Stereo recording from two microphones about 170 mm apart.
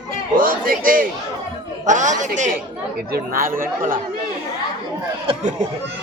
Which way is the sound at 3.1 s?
60° right (ahead or behind).